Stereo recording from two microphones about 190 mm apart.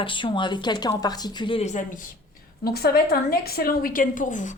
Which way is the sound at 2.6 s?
55° left (ahead or behind).